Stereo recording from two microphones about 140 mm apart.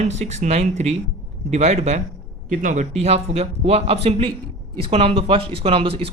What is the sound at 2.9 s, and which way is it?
Speech, 50° right (ahead or behind).